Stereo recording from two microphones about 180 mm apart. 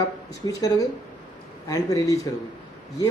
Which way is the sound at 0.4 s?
20° left (ahead or behind).